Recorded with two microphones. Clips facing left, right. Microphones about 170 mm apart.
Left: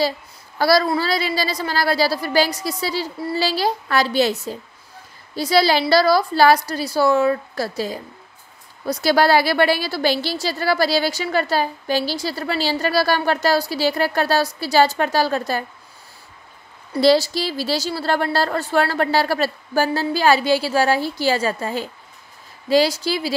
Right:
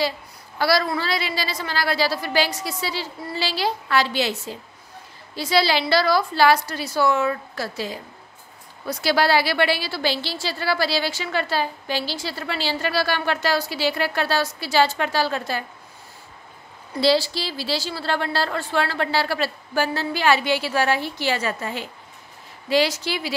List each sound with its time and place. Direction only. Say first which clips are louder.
0.6 s a woman's voice: left 4 dB; 40° left (ahead or behind)
16.9 s a woman's voice: left 4 dB; 45° left (ahead or behind)